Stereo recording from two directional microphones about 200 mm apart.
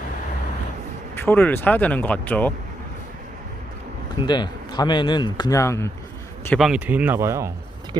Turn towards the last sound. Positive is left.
turn(degrees=-15)  # may be behind; listen again after turning